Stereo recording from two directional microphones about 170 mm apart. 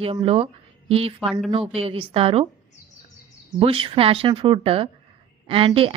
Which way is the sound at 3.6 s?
30° right (ahead or behind).